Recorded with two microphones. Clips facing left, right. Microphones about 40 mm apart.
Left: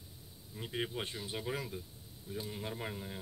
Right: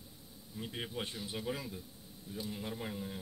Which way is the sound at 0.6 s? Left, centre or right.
Centre.